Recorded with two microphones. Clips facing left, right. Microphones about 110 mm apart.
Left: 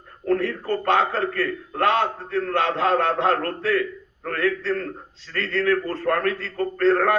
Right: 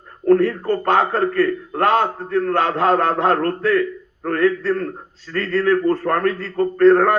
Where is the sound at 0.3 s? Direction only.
40° right (ahead or behind).